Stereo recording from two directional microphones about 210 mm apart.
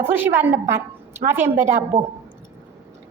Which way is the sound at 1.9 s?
25° right (ahead or behind).